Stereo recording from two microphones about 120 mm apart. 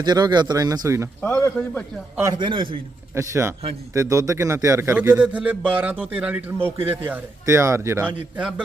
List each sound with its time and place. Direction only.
0.0 s a man's voice: 35° right (ahead or behind)
1.2 s a man's voice: 15° left (ahead or behind)
2.4 s a man's voice: 45° right (ahead or behind)
3.2 s a man's voice: 25° right (ahead or behind)
8.4 s a man's voice: 5° right (ahead or behind)